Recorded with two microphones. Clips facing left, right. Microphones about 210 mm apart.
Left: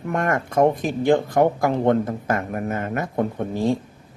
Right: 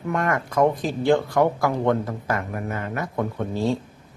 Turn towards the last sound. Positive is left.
turn(degrees=15)  # may be behind; listen again after turning